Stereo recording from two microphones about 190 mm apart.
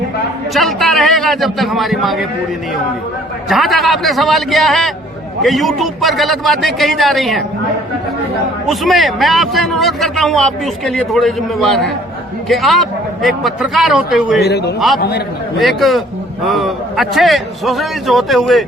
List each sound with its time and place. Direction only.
0.5 s a man's voice: centre (ahead or behind)
3.5 s a man's voice: centre (ahead or behind)
8.6 s a man's voice: centre (ahead or behind)
14.4 s a man's voice: 60° left (ahead or behind)
15.5 s a man's voice: centre (ahead or behind)